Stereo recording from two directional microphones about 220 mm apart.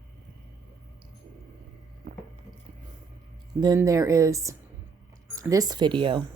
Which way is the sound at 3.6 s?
15° right (ahead or behind).